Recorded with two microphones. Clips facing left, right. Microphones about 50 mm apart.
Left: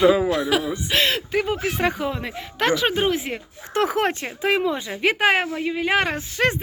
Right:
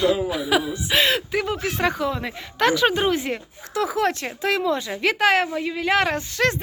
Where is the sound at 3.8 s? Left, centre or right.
Left.